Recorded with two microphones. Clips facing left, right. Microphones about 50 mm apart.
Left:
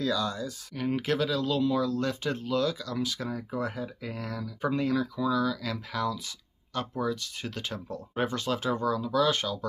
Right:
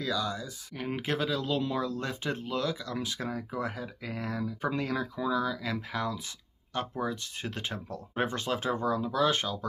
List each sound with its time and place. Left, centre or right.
0.0 s speech: centre